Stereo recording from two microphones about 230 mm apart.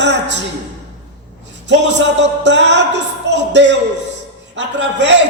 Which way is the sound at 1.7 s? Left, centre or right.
Right.